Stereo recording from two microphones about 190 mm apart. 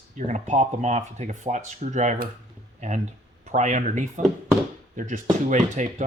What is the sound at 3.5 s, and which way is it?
Speech, 40° right (ahead or behind).